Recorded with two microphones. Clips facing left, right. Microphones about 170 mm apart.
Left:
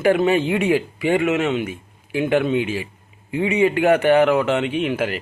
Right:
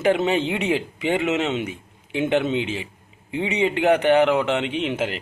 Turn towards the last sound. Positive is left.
turn(degrees=-20)  # may be behind; listen again after turning